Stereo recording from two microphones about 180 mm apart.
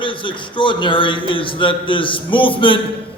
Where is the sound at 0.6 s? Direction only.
25° left (ahead or behind).